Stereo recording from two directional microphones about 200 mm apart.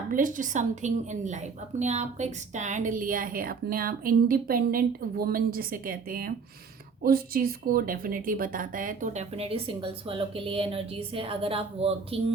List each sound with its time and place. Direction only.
0.1 s a woman's voice: 40° right (ahead or behind)